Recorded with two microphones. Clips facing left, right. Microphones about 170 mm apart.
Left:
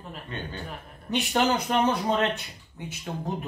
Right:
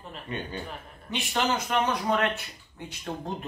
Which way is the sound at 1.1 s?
40° left (ahead or behind).